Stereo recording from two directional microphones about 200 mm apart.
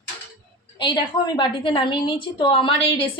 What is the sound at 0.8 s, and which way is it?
A woman's voice, 20° left (ahead or behind).